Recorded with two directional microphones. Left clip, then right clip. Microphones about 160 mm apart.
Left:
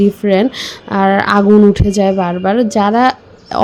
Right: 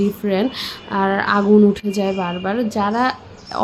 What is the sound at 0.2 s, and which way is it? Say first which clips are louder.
Speech: left 7 dB; 35° left (ahead or behind).